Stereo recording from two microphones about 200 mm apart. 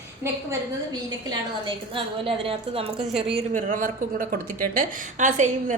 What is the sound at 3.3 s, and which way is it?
Speech, 40° right (ahead or behind).